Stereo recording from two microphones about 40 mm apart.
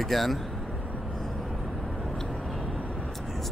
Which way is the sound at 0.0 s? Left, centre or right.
Centre.